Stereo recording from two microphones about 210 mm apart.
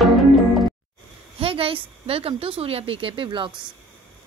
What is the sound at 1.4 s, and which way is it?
A woman's voice, 25° right (ahead or behind).